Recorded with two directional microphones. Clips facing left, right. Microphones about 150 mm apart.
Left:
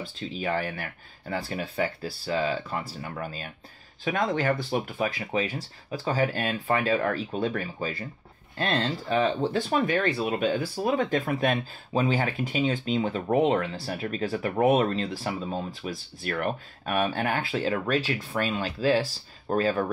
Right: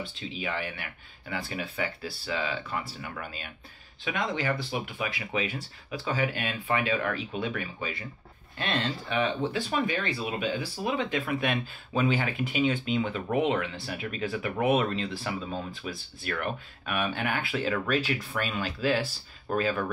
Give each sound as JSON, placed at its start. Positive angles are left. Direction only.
{"t": 0.2, "sound": "speech", "side_deg": 45}
{"t": 9.5, "sound": "speech", "side_deg": 45}